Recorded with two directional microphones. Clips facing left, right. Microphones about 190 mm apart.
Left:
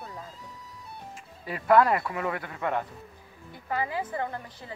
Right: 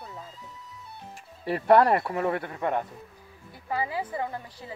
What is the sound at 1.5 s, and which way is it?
Speech, 35° right (ahead or behind).